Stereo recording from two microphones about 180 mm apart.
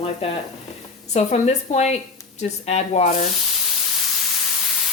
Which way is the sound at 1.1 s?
40° left (ahead or behind).